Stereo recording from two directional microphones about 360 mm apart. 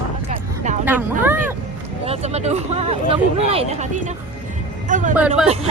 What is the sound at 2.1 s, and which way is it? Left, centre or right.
Speech, centre.